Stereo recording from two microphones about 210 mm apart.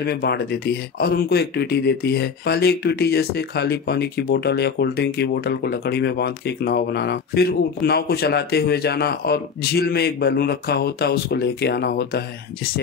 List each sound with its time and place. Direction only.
0.0 s speech: 50° left (ahead or behind)